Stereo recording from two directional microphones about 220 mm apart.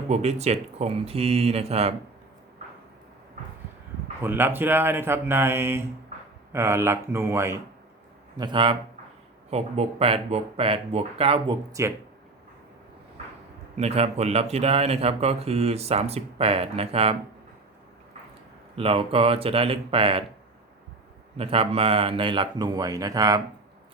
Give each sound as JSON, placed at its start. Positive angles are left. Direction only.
{"t": 0.1, "sound": "a man's voice", "side_deg": -30}
{"t": 4.2, "sound": "a man's voice", "side_deg": -10}
{"t": 11.7, "sound": "speech", "side_deg": -10}
{"t": 13.7, "sound": "a man's voice", "side_deg": -30}
{"t": 18.8, "sound": "a man's voice", "side_deg": -25}
{"t": 21.3, "sound": "a man's voice", "side_deg": -25}